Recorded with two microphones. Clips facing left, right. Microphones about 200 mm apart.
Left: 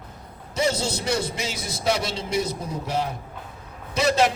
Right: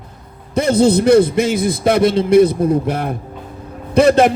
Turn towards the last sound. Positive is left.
turn(degrees=-55)  # may be behind; listen again after turning